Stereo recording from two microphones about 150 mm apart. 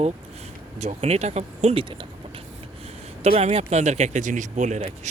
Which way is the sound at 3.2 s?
45° right (ahead or behind).